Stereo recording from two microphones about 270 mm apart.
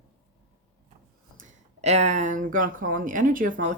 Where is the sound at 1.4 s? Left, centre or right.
Right.